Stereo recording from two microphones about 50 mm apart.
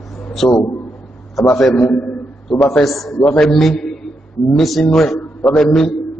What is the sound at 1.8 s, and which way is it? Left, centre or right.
Speech, left.